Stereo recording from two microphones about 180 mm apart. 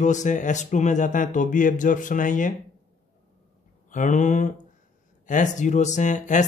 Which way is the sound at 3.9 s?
45° left (ahead or behind).